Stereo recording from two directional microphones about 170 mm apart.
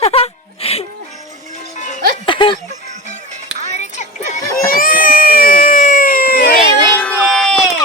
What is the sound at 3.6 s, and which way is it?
Music, 45° left (ahead or behind).